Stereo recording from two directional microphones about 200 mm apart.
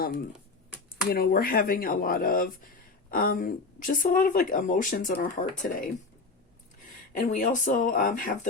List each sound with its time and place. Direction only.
1.1 s speech: 50° left (ahead or behind)
7.1 s speech: 40° left (ahead or behind)